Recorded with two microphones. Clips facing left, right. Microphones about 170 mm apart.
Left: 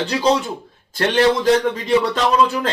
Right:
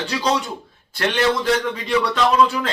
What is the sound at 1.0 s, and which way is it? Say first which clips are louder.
A man's voice: left 4 dB; 40° left (ahead or behind).